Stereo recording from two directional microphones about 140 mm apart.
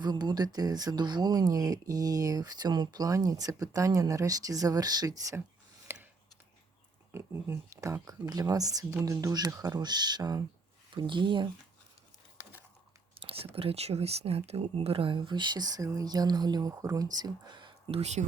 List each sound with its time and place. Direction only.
0.0 s speech: 30° right (ahead or behind)
5.9 s a sound: 15° right (ahead or behind)
7.1 s speech: 20° right (ahead or behind); by 11.4 s 35° right (ahead or behind)
13.2 s speech: 45° right (ahead or behind)
18.0 s speech: 55° right (ahead or behind)